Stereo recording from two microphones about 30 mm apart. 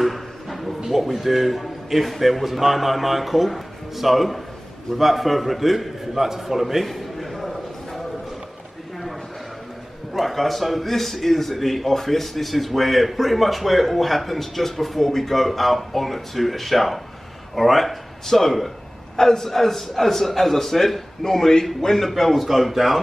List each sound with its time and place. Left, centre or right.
0.0 s a sound: centre
0.8 s a man's voice: centre
10.1 s a man's voice: centre
18.2 s a man's voice: centre
21.2 s a man's voice: centre
21.9 s a man's voice: centre